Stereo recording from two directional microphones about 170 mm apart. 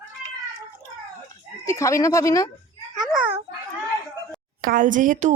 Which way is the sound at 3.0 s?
5° right (ahead or behind).